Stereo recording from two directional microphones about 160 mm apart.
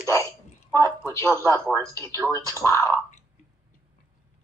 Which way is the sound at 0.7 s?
20° left (ahead or behind).